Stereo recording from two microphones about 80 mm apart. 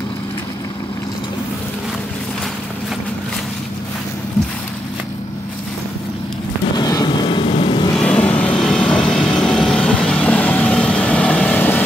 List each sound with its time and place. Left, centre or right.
6.8 s vehicle: left
7.9 s vehicle: centre